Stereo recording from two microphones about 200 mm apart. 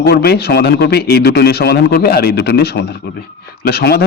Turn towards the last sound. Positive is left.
turn(degrees=55)  # may be behind; listen again after turning